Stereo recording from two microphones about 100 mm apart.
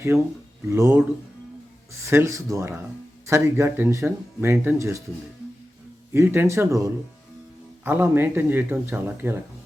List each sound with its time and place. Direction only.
0.1 s speech: centre (ahead or behind)
0.7 s speech: 30° right (ahead or behind)
6.1 s speech: 20° right (ahead or behind)
7.9 s speech: 20° right (ahead or behind)